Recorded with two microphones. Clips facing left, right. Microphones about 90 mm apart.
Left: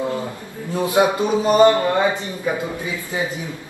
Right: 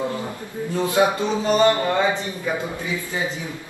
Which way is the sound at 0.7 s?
20° left (ahead or behind).